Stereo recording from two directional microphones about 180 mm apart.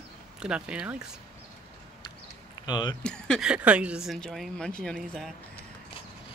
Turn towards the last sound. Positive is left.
turn(degrees=5)  # may be behind; listen again after turning